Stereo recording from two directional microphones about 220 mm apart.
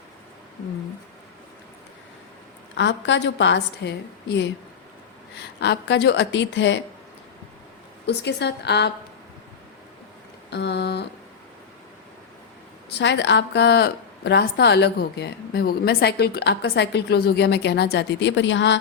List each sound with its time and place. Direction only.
2.7 s a woman's voice: 55° left (ahead or behind)
8.0 s a woman's voice: 50° left (ahead or behind)
10.5 s a woman's voice: 50° left (ahead or behind)
13.0 s a woman's voice: 55° left (ahead or behind)